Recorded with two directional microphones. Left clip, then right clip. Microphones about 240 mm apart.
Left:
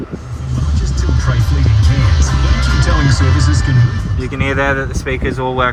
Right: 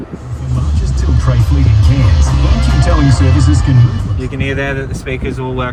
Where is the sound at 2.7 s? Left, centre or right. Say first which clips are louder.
Right 2 dB; centre.